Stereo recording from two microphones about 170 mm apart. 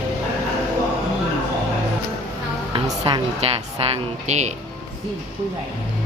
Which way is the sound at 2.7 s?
30° right (ahead or behind).